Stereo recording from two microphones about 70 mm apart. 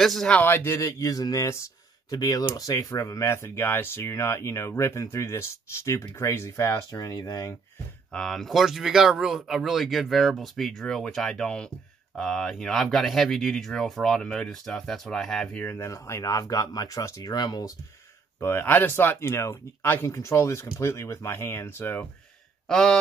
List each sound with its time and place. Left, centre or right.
0.0 s speech: centre
0.4 s speech: left
2.0 s speech: left
2.5 s speech: left
3.3 s speech: left
6.9 s speech: left
8.1 s speech: centre
15.5 s speech: left
15.8 s speech: left
18.4 s speech: left
22.7 s speech: centre